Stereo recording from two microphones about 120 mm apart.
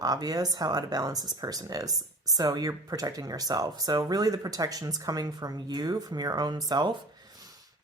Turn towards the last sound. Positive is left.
turn(degrees=-35)  # may be behind; listen again after turning